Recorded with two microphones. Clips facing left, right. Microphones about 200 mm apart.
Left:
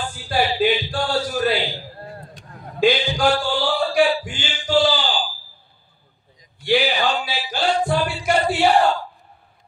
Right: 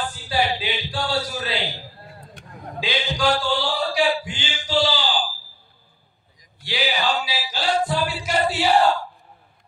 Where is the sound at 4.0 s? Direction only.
50° left (ahead or behind).